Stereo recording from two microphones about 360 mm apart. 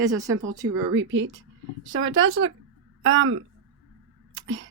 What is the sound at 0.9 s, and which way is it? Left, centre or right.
A woman's voice, right.